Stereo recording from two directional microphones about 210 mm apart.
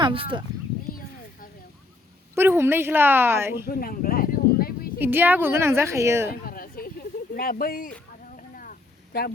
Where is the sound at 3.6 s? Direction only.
45° left (ahead or behind).